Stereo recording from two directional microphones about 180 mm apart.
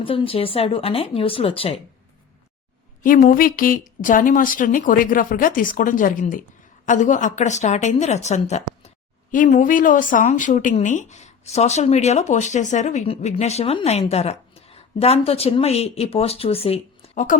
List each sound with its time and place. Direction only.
0.0 s speech: 30° left (ahead or behind)
3.0 s speech: 45° left (ahead or behind)